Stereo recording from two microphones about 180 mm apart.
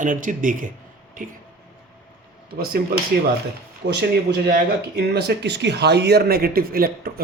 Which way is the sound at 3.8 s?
65° right (ahead or behind).